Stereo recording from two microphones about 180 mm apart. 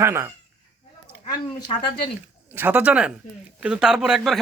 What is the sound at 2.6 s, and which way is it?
A man's voice, 10° right (ahead or behind).